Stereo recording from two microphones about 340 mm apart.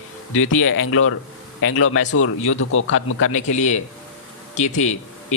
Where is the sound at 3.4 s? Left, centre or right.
Centre.